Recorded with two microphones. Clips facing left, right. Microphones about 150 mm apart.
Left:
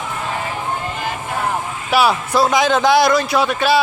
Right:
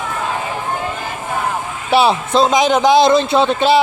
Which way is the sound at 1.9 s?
25° right (ahead or behind).